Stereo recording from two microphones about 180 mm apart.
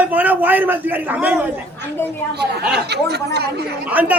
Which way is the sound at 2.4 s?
65° right (ahead or behind).